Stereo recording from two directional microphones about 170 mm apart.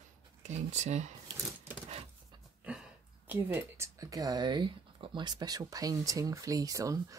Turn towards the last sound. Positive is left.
turn(degrees=-20)  # may be behind; listen again after turning